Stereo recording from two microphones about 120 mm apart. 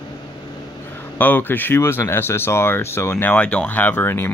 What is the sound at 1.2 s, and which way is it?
Speech, 15° left (ahead or behind).